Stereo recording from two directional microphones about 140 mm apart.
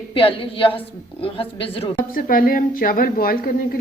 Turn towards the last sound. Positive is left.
turn(degrees=90)